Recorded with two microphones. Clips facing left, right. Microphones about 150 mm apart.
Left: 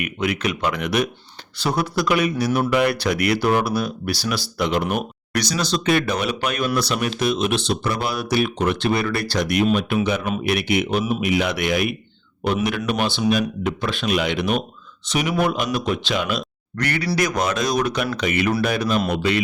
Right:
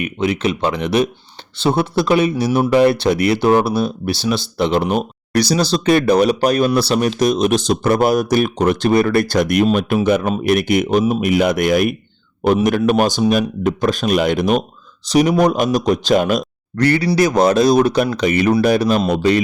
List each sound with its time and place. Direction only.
0.0 s speech: 30° right (ahead or behind); by 16.5 s 45° right (ahead or behind)
16.7 s speech: 30° right (ahead or behind)